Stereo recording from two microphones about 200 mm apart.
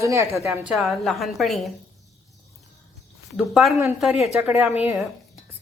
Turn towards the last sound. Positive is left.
turn(degrees=-5)  # may be behind; listen again after turning